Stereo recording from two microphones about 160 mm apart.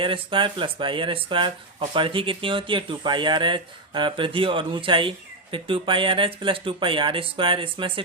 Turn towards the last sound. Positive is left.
turn(degrees=-35)  # may be behind; listen again after turning